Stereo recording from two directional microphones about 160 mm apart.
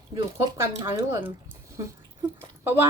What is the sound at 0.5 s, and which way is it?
A woman's voice, 15° right (ahead or behind).